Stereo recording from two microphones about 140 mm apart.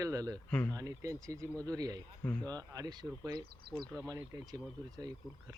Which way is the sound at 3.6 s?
90° right.